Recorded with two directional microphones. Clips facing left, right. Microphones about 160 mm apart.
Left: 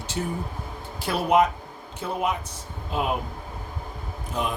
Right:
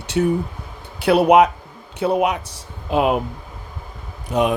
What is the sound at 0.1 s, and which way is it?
Speech, 80° right.